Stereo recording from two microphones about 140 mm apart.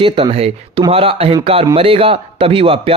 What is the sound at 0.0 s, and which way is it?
Speech, 40° right (ahead or behind).